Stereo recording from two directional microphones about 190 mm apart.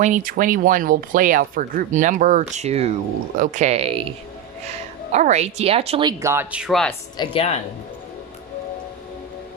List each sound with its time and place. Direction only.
0.0 s speech: 45° right (ahead or behind)
5.1 s speech: 35° right (ahead or behind); by 6.9 s centre (ahead or behind)
7.2 s speech: 30° left (ahead or behind)